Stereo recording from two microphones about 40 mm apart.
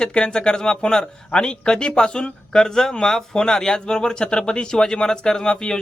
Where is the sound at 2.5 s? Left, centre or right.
Centre.